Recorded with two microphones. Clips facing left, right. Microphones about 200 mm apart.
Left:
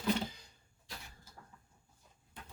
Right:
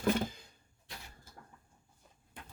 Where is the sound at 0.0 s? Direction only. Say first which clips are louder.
Right 3 dB; 50° right (ahead or behind).